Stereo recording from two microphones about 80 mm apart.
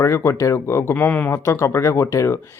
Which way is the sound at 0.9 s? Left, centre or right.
Left.